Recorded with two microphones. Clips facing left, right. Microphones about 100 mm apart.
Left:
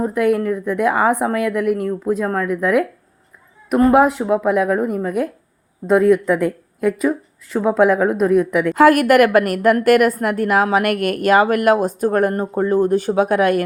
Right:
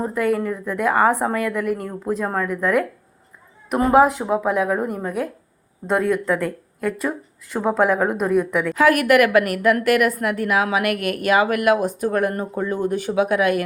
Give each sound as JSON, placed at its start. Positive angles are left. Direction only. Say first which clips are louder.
{"t": 0.0, "sound": "a woman's voice", "louder": "left 4 dB", "side_deg": 5}
{"t": 8.7, "sound": "a woman's voice", "louder": "left 4 dB", "side_deg": 40}